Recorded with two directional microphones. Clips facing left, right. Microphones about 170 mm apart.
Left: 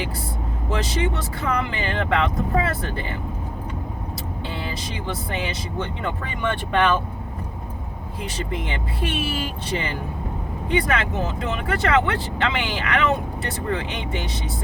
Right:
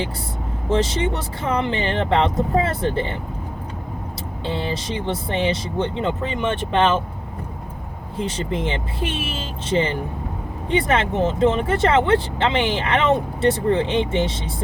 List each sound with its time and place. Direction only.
0.7 s speech: 25° right (ahead or behind)
4.4 s speech: 25° right (ahead or behind)
8.2 s speech: 25° right (ahead or behind)